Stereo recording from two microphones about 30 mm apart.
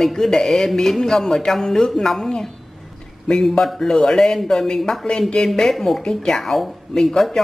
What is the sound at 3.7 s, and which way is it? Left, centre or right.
Speech, centre.